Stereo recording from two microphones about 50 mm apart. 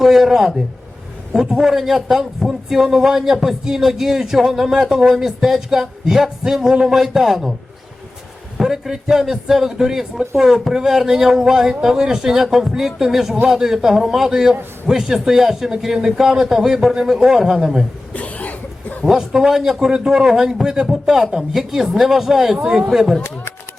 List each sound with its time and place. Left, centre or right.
0.0 s a man's voice: centre
8.5 s a man's voice: centre
18.1 s a sound: left
19.0 s a man's voice: centre
22.6 s a man's voice: centre
22.9 s a man's voice: centre